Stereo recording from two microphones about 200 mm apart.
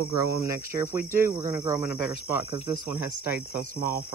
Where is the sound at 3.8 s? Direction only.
15° right (ahead or behind).